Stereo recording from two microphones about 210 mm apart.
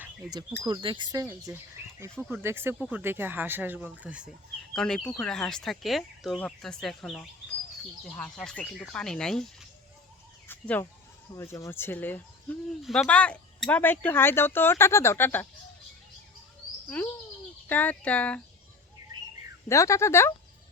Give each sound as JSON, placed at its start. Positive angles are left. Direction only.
{"t": 0.0, "sound": "bird", "side_deg": -20}
{"t": 0.6, "sound": "speech", "side_deg": -20}
{"t": 17.0, "sound": "speech", "side_deg": 5}
{"t": 19.6, "sound": "speech", "side_deg": 15}